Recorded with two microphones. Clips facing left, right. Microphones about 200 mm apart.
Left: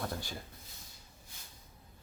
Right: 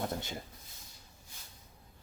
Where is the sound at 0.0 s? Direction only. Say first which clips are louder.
Right 3 dB; 20° right (ahead or behind).